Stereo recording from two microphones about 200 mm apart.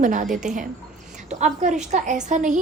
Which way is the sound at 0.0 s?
40° right (ahead or behind).